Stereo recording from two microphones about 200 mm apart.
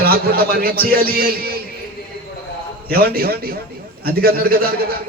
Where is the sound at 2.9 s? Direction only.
50° right (ahead or behind).